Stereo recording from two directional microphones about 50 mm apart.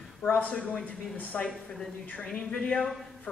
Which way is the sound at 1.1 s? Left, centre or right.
Left.